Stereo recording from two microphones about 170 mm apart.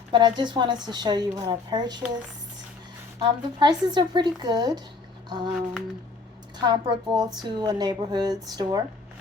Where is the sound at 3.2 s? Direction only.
25° right (ahead or behind).